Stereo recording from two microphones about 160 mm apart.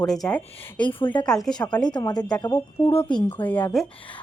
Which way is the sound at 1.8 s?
25° left (ahead or behind).